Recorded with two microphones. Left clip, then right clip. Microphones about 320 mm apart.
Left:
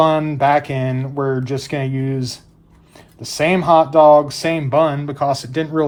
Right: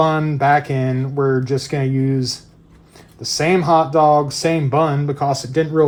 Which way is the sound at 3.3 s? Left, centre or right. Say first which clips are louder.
Left 2 dB; left.